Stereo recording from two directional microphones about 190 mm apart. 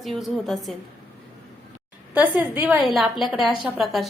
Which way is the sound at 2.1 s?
10° right (ahead or behind).